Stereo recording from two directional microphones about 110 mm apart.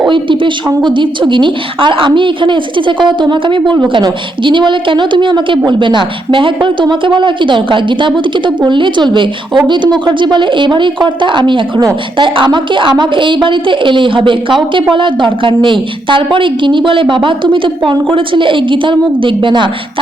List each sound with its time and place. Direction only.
0.1 s a woman's voice: 50° right (ahead or behind)